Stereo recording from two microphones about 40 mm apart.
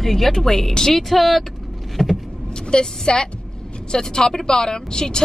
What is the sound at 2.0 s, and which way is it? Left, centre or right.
Vehicle, centre.